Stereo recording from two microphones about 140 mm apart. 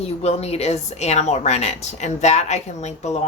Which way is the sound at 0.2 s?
50° left (ahead or behind).